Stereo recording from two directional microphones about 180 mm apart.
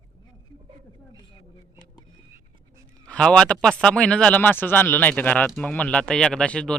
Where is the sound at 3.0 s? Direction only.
5° left (ahead or behind).